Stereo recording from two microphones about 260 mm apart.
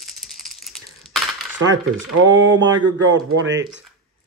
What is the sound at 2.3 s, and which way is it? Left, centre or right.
Speech, right.